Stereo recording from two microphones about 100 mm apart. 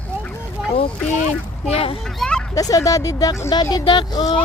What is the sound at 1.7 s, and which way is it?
Speech, 75° left (ahead or behind).